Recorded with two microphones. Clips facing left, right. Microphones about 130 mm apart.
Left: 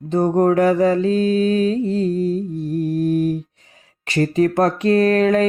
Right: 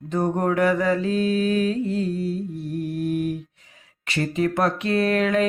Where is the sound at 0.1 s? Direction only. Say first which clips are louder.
Left 7 dB; 35° left (ahead or behind).